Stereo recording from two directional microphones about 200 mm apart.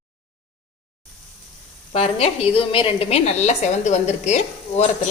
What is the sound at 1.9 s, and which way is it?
A woman's voice, 30° left (ahead or behind).